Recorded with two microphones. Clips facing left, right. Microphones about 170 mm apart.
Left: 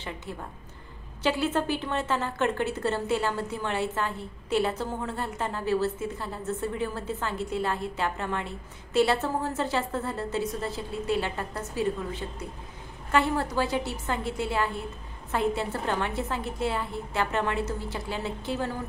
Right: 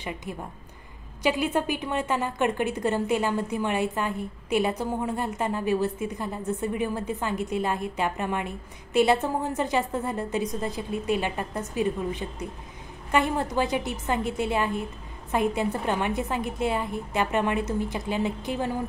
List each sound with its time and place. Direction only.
0.0 s a woman's voice: 15° right (ahead or behind)